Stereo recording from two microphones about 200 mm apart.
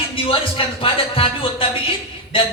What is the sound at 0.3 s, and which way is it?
A man's voice, 25° left (ahead or behind).